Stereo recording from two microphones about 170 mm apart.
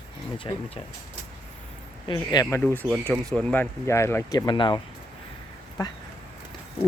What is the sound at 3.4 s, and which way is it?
Speech, 10° left (ahead or behind).